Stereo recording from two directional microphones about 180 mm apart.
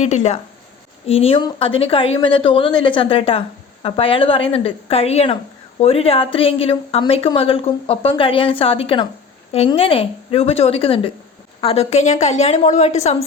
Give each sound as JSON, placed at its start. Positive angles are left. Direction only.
{"t": 0.0, "sound": "speech", "side_deg": 40}